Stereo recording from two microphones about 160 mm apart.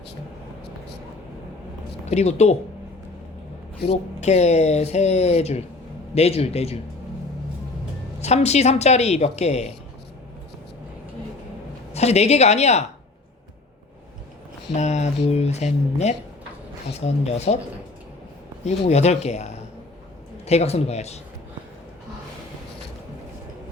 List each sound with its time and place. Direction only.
2.0 s speech: 40° left (ahead or behind)
3.8 s speech: 45° left (ahead or behind)
8.2 s speech: 45° left (ahead or behind)
11.9 s speech: 40° left (ahead or behind)
14.7 s speech: 45° left (ahead or behind)
18.6 s speech: 45° left (ahead or behind)